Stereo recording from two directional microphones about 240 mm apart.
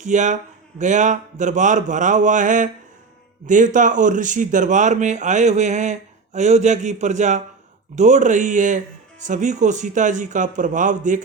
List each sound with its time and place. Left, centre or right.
0.0 s speech: right